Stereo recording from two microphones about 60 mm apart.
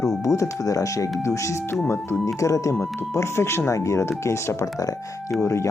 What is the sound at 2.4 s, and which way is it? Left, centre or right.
Speech, left.